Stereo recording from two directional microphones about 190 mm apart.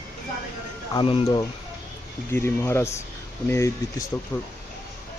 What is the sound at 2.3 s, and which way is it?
Speech, 15° left (ahead or behind).